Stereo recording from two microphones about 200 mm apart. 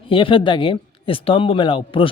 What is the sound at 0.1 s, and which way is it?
Speech, 25° left (ahead or behind).